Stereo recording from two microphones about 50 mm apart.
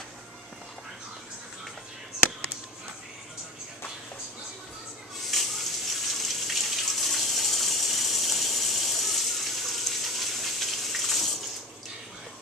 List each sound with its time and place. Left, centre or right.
5.2 s water tap: centre